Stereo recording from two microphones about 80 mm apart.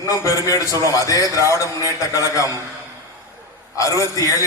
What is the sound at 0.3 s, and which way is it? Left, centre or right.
A man's voice, left.